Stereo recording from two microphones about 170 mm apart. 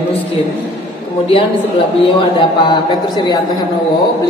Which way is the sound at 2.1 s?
30° left (ahead or behind).